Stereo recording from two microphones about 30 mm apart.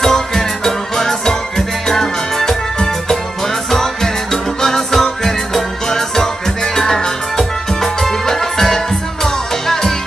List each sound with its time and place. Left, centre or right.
0.0 s music: centre
3.7 s music: centre